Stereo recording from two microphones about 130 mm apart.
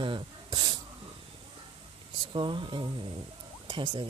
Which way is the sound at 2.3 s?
40° right (ahead or behind).